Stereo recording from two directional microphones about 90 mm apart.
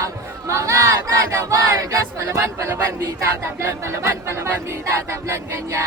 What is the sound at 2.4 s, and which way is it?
Speech, 25° right (ahead or behind).